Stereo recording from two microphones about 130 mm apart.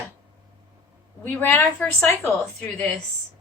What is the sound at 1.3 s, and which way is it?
Speech, 15° left (ahead or behind).